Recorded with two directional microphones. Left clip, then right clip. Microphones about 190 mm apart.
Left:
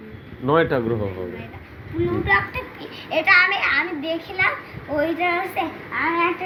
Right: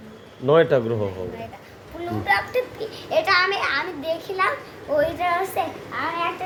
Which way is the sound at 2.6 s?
40° right (ahead or behind).